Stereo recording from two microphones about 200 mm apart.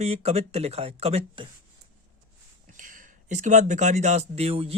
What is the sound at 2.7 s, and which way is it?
Speech, 40° right (ahead or behind).